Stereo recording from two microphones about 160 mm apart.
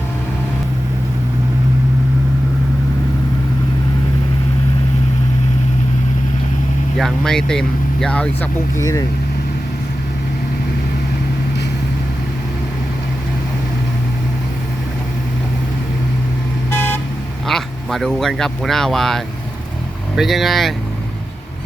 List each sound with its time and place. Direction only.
6.9 s speech: 5° left (ahead or behind)
8.8 s speech: 20° left (ahead or behind)
16.7 s vehicle: 10° left (ahead or behind)
17.4 s speech: centre (ahead or behind)